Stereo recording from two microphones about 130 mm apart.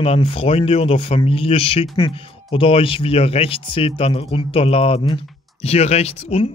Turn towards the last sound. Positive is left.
turn(degrees=55)  # may be behind; listen again after turning